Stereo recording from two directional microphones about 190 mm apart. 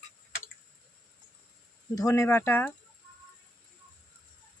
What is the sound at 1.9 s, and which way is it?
Speech, 15° left (ahead or behind).